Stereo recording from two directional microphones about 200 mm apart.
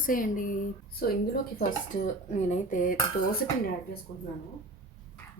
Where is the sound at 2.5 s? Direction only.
40° left (ahead or behind).